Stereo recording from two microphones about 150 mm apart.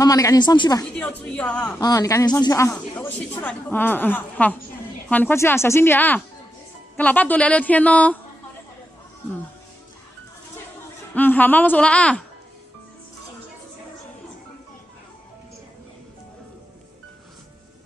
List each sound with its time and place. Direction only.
0.0 s a woman's voice: 25° left (ahead or behind)
0.9 s a woman's voice: 10° left (ahead or behind)
1.8 s a woman's voice: 25° left (ahead or behind)
11.1 s a woman's voice: 10° left (ahead or behind)